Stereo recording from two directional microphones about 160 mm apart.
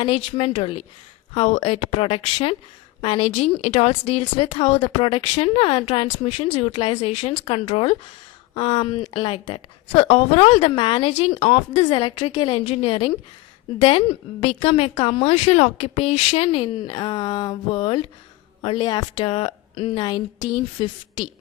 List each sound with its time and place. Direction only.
0.0 s a woman's voice: 35° left (ahead or behind)